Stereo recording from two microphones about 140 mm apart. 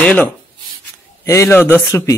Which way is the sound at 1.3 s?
20° left (ahead or behind).